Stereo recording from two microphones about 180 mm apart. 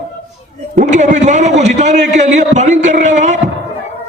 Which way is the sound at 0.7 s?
40° right (ahead or behind).